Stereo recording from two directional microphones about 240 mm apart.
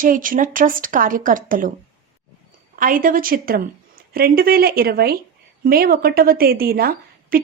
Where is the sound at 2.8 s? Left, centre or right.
Right.